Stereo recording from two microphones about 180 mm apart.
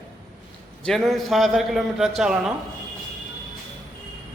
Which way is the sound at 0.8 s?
Centre (ahead or behind).